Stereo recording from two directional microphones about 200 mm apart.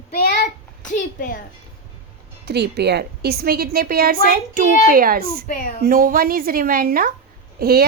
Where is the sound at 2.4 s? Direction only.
55° right (ahead or behind).